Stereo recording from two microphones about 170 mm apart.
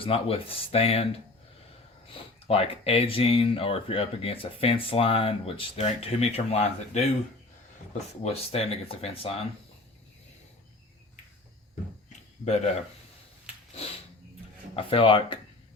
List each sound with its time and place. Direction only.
0.0 s speech: 35° left (ahead or behind)
14.8 s speech: 30° left (ahead or behind)